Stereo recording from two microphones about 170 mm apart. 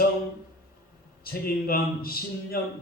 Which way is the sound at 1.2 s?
60° left (ahead or behind).